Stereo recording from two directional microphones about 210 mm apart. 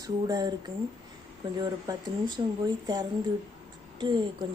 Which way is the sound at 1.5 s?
20° right (ahead or behind).